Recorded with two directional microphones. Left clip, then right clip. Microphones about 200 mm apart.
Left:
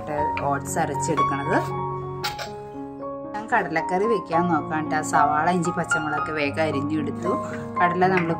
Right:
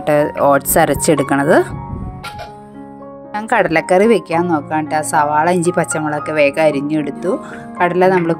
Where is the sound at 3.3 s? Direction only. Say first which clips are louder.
Right 9 dB; 45° right (ahead or behind).